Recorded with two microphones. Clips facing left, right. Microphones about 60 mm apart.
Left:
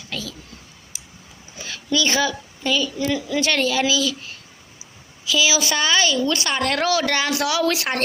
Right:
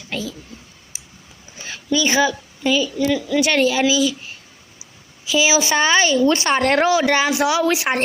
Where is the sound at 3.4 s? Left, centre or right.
Centre.